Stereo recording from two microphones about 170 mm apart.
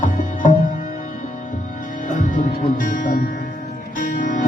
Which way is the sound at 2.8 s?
50° left (ahead or behind).